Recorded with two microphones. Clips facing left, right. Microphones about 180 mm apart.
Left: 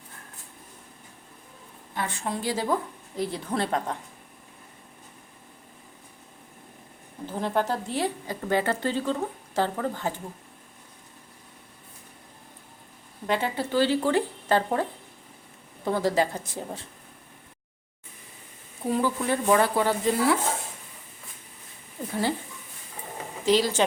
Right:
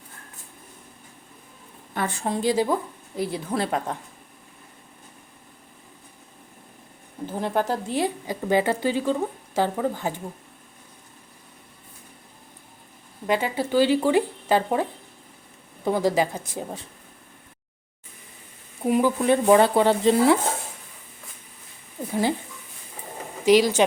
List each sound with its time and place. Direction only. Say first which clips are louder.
2.2 s a woman's voice: right 6 dB; 20° right (ahead or behind)
7.3 s a woman's voice: right 2 dB; 10° right (ahead or behind)
13.2 s a woman's voice: right 3 dB; 10° right (ahead or behind)
18.8 s speech: right 5 dB; 15° right (ahead or behind)
22.0 s a sound: right 2 dB; 5° right (ahead or behind)
23.5 s a woman's voice: right 5 dB; 15° right (ahead or behind)